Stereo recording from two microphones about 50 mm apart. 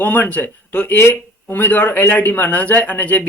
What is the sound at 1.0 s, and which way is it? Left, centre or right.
A man's voice, left.